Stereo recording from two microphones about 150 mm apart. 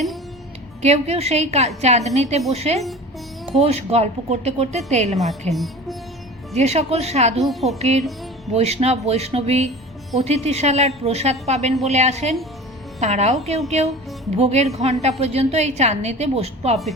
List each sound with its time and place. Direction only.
0.8 s a woman's voice: 45° right (ahead or behind)
5.1 s speech: centre (ahead or behind)
6.5 s a woman's voice: 45° right (ahead or behind)
7.4 s speech: centre (ahead or behind)
7.8 s a woman's voice: 45° right (ahead or behind)